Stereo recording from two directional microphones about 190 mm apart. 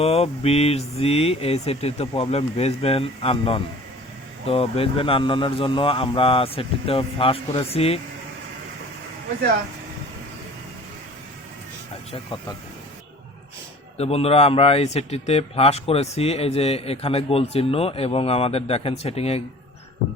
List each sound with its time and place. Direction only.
0.0 s a man's voice: 30° left (ahead or behind)
12.1 s a man's voice: 25° left (ahead or behind)
14.0 s a man's voice: 35° left (ahead or behind)